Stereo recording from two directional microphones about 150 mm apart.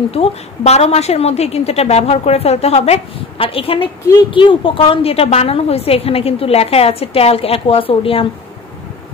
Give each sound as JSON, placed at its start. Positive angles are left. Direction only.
{"t": 0.1, "sound": "a woman's voice", "side_deg": 45}